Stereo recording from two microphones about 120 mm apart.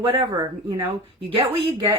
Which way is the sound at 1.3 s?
50° right (ahead or behind).